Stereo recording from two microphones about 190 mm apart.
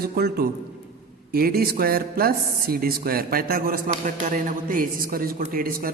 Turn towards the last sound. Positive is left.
turn(degrees=-50)  # may be behind; listen again after turning